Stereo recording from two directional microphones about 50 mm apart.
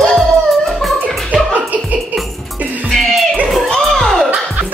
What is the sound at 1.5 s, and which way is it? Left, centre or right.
Music, right.